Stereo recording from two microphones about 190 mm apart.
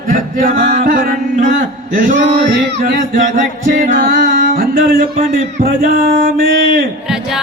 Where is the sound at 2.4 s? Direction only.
70° right (ahead or behind).